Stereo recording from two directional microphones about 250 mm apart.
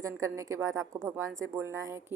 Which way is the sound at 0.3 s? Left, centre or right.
Centre.